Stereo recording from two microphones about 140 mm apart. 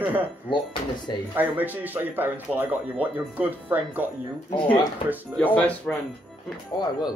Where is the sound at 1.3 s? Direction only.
15° right (ahead or behind).